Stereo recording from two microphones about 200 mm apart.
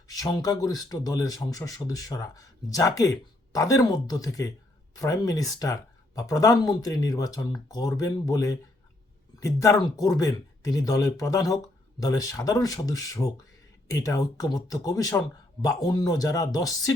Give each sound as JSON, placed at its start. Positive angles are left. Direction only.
{"t": 0.1, "sound": "speech", "side_deg": 20}